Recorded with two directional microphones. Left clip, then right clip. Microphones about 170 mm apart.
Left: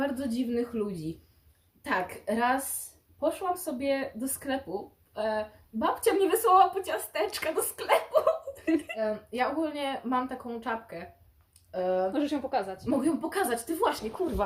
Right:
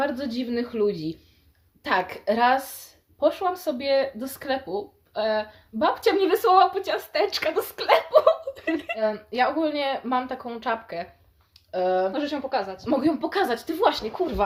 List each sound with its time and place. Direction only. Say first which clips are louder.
0.0 s speech: right 4 dB; 35° right (ahead or behind)
12.1 s a woman's voice: right 3 dB; 10° left (ahead or behind)
12.8 s speech: right 5 dB; 35° right (ahead or behind)